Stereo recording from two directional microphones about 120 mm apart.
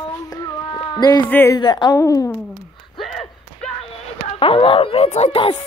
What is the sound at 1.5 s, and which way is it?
Speech, 35° left (ahead or behind).